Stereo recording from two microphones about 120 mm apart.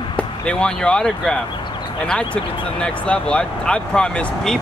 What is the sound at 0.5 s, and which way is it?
Speech, 5° left (ahead or behind).